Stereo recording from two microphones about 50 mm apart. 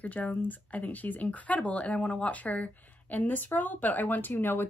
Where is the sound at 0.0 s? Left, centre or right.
Left.